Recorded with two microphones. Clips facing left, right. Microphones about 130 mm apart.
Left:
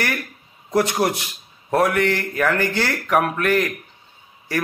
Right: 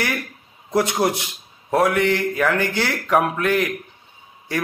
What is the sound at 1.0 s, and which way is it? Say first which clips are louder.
Speech: right 1 dB; 15° right (ahead or behind).